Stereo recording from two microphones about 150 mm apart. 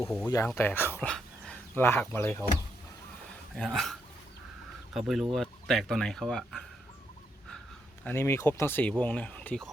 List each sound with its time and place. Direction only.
0.3 s speech: 20° left (ahead or behind)
3.5 s speech: centre (ahead or behind)
4.9 s speech: centre (ahead or behind)
8.0 s speech: 15° left (ahead or behind)